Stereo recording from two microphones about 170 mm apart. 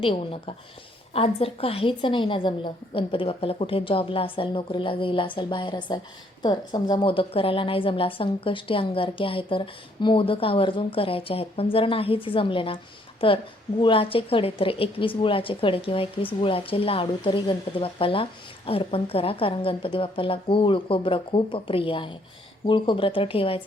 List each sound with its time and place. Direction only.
0.0 s a woman's voice: 35° left (ahead or behind)